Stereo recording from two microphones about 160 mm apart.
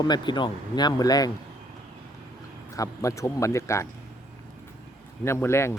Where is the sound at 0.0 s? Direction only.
25° left (ahead or behind).